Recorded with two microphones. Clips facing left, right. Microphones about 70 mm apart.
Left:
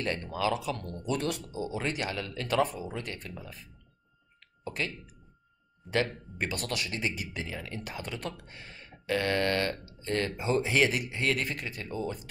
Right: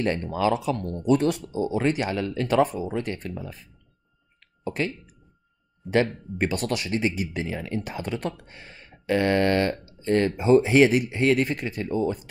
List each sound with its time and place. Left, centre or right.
0.0 s speech: right
4.6 s speech: right